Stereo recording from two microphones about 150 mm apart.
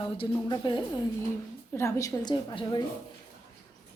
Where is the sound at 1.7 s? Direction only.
20° left (ahead or behind).